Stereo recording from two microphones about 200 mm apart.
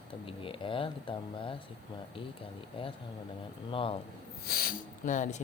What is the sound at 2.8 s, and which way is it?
Speech, 25° left (ahead or behind).